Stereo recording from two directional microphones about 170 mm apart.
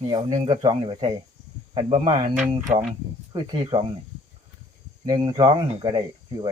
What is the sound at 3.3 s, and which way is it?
Speech, 25° right (ahead or behind).